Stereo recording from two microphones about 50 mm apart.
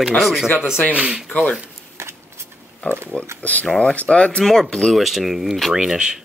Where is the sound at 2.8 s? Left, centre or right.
Left.